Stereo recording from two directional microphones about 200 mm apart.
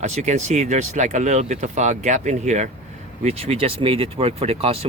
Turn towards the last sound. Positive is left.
turn(degrees=-30)  # may be behind; listen again after turning